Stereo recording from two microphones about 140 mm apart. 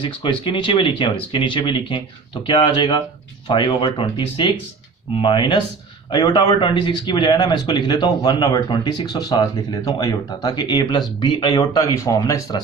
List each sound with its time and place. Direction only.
0.0 s speech: 35° left (ahead or behind)